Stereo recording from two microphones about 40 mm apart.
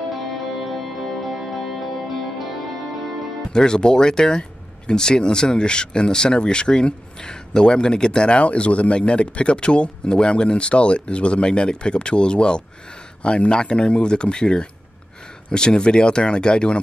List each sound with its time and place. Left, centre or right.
0.1 s music: centre
3.5 s speech: centre